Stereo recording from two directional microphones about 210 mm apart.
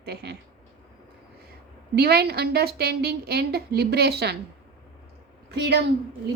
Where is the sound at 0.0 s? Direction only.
50° right (ahead or behind).